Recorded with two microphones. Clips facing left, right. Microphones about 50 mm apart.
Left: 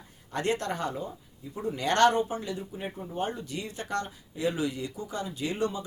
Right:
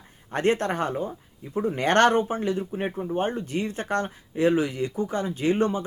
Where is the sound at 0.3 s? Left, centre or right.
Right.